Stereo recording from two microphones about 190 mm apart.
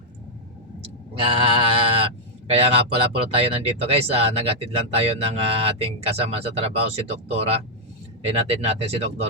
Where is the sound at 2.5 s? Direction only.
30° right (ahead or behind).